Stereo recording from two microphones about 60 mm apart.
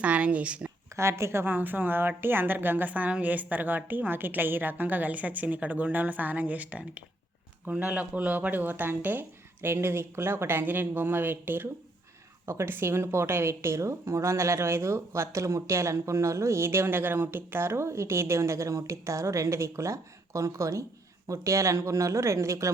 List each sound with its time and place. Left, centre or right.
0.0 s a woman's voice: right
0.9 s a woman's voice: right
1.5 s a woman's voice: right
9.7 s a woman's voice: right